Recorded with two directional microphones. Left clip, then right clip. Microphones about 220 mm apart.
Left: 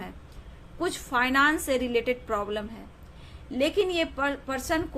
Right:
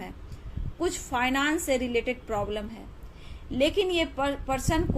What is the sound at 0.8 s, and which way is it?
A woman's voice, 15° left (ahead or behind).